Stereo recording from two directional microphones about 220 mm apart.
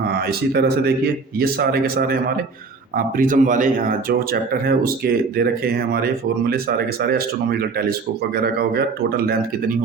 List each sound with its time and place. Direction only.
0.1 s speech: 45° right (ahead or behind)